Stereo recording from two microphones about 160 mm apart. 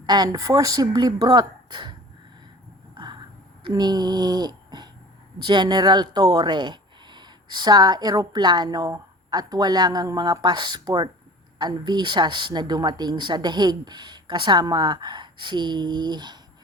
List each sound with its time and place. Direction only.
0.0 s speech: 25° right (ahead or behind)
2.9 s a sound: 30° right (ahead or behind)
3.7 s speech: 25° right (ahead or behind)